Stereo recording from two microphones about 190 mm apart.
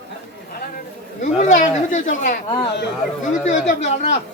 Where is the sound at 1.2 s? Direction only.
40° left (ahead or behind).